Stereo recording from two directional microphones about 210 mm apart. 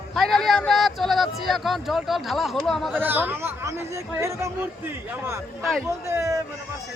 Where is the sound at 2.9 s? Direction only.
10° right (ahead or behind).